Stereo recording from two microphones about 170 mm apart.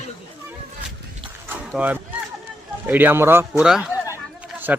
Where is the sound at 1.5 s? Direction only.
10° right (ahead or behind).